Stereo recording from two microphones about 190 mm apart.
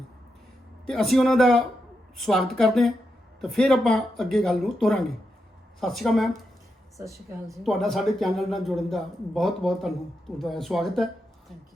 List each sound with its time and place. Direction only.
0.9 s a man's voice: centre (ahead or behind)
7.0 s a woman's voice: 15° right (ahead or behind)
7.5 s a man's voice: centre (ahead or behind)